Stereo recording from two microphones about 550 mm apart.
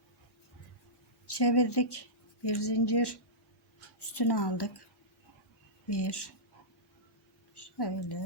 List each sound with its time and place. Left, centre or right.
1.3 s speech: left
5.9 s speech: left
7.5 s a woman's voice: left